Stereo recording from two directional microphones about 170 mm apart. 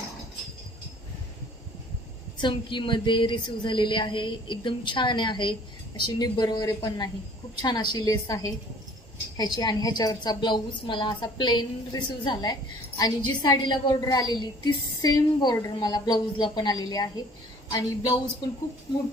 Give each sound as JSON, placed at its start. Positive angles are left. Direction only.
{"t": 2.3, "sound": "a woman's voice", "side_deg": 30}
{"t": 9.6, "sound": "a woman's voice", "side_deg": 20}